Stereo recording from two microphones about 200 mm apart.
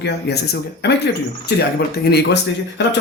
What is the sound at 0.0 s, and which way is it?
Speech, 55° left (ahead or behind).